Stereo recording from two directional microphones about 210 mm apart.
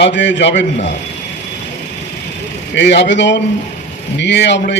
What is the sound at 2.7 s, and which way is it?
A man's voice, 55° left (ahead or behind).